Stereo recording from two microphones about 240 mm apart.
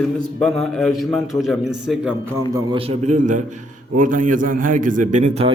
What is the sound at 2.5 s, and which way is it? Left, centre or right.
A man's voice, right.